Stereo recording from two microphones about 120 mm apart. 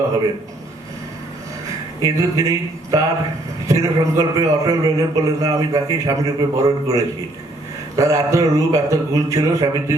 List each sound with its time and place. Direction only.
2.0 s a man's voice: 30° right (ahead or behind)